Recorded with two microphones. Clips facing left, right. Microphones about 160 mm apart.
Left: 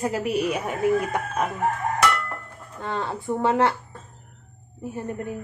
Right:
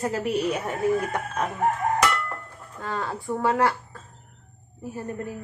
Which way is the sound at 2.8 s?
25° left (ahead or behind).